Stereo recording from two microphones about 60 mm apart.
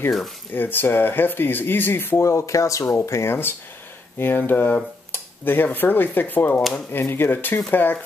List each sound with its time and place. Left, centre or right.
0.6 s speech: left
2.2 s speech: left
3.1 s speech: left
5.1 s cutlery: left
6.9 s speech: left